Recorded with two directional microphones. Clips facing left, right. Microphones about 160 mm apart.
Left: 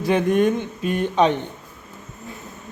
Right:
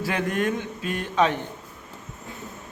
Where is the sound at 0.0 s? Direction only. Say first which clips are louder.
Left 7 dB; 20° left (ahead or behind).